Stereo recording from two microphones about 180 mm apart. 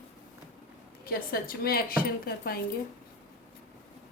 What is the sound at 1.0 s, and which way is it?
Speech, 55° left (ahead or behind).